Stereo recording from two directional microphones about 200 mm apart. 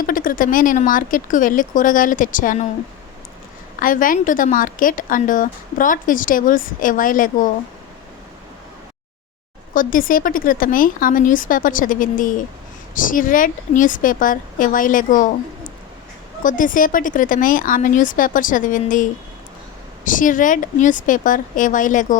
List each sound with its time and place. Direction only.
0.0 s speech: 45° left (ahead or behind)
3.8 s speech: 45° left (ahead or behind)
9.7 s speech: 45° left (ahead or behind)
16.4 s speech: 40° left (ahead or behind)
20.1 s speech: 40° left (ahead or behind)